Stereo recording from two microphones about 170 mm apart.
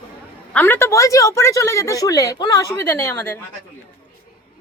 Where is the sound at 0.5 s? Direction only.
10° left (ahead or behind).